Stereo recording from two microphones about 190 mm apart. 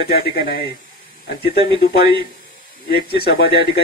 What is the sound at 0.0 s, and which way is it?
Speech, 60° left (ahead or behind).